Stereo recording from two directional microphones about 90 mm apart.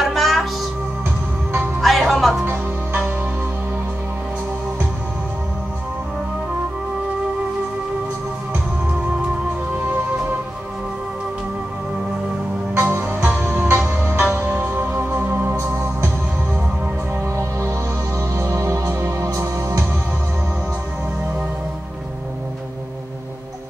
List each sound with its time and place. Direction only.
0.0 s music: centre (ahead or behind)
1.8 s music: centre (ahead or behind)
12.7 s music: 30° right (ahead or behind)
13.0 s music: 15° right (ahead or behind)
17.4 s music: 35° right (ahead or behind)